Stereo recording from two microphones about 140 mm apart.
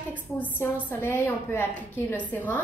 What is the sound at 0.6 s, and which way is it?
A woman's voice, 15° left (ahead or behind).